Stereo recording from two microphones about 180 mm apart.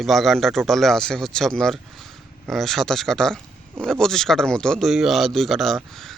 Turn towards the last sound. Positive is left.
turn(degrees=0)  # may be behind; listen again after turning